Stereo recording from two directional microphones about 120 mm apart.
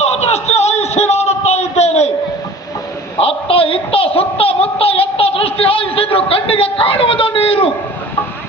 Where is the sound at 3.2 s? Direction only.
50° left (ahead or behind).